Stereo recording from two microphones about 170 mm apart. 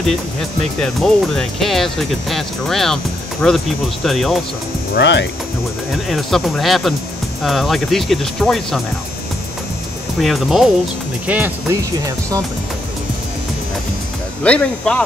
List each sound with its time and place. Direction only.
0.7 s speech: 5° left (ahead or behind)
4.9 s speech: 90° left
6.0 s speech: centre (ahead or behind)
10.2 s speech: centre (ahead or behind); by 12.4 s 20° right (ahead or behind)
14.4 s speech: 5° left (ahead or behind)